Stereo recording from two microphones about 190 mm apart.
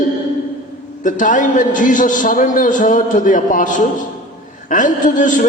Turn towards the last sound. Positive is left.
turn(degrees=45)  # may be behind; listen again after turning